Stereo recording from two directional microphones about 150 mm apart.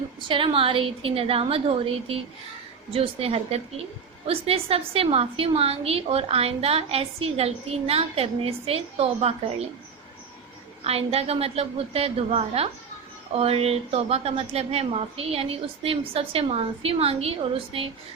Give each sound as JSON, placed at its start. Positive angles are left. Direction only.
{"t": 0.2, "sound": "a woman's voice", "side_deg": -35}
{"t": 10.8, "sound": "a woman's voice", "side_deg": -40}